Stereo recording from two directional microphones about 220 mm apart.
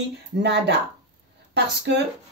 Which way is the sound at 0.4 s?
50° right (ahead or behind).